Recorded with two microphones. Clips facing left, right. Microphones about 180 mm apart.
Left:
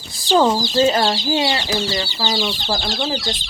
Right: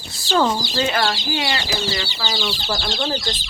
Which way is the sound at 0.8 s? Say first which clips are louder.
Left 3 dB; 35° left (ahead or behind).